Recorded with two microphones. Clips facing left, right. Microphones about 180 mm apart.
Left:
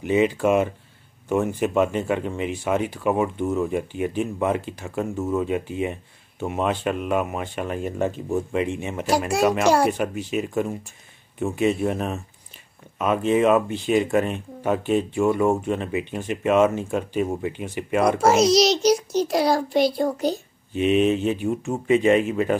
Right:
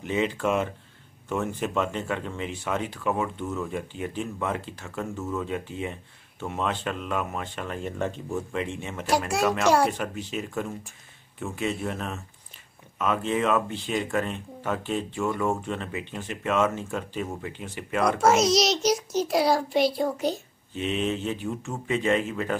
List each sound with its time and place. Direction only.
0.0 s speech: 10° left (ahead or behind)
8.3 s speech: 25° left (ahead or behind)
9.4 s speech: 25° left (ahead or behind)
9.8 s speech: 10° left (ahead or behind)
18.2 s a child's voice: centre (ahead or behind)
20.7 s speech: 15° left (ahead or behind)